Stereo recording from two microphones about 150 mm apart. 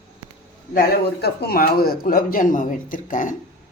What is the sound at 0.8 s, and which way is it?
Speech, 90° left.